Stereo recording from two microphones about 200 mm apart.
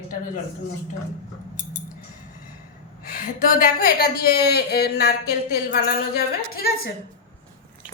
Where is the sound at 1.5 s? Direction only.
40° left (ahead or behind).